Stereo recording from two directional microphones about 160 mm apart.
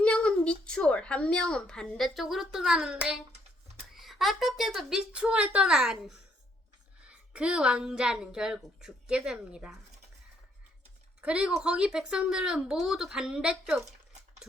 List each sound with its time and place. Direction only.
0.0 s a woman's voice: 5° left (ahead or behind)
11.2 s a woman's voice: 5° right (ahead or behind)